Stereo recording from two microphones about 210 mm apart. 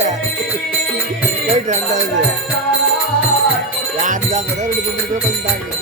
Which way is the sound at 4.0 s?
40° right (ahead or behind).